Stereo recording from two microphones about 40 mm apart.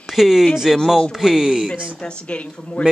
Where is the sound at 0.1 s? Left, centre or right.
Centre.